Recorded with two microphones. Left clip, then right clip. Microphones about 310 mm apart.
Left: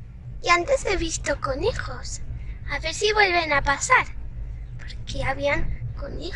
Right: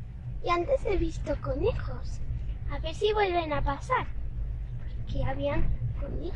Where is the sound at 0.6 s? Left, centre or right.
Left.